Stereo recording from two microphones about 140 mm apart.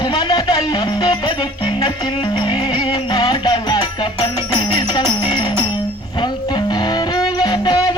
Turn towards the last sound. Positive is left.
turn(degrees=30)  # may be behind; listen again after turning